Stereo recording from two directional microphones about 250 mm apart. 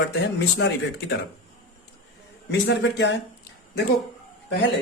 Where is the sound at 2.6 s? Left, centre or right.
Left.